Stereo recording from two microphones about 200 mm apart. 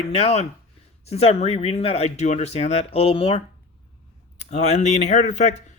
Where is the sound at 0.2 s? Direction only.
30° left (ahead or behind).